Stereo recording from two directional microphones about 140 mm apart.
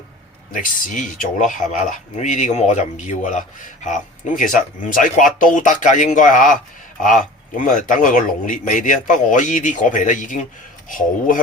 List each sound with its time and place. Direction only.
0.5 s speech: 70° left (ahead or behind)